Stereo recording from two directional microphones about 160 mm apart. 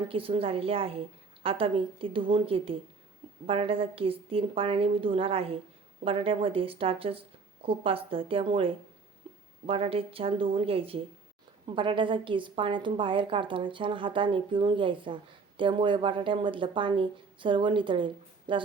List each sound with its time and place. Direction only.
0.1 s a woman's voice: 35° right (ahead or behind)